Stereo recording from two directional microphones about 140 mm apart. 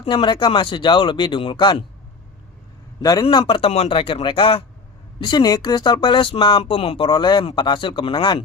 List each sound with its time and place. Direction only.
0.0 s speech: 35° left (ahead or behind)
3.0 s speech: 25° left (ahead or behind)